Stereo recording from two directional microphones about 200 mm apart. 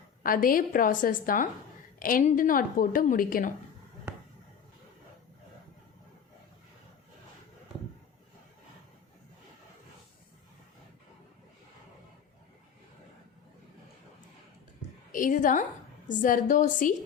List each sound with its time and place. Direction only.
0.2 s a woman's voice: 45° left (ahead or behind)
15.1 s a woman's voice: 40° left (ahead or behind)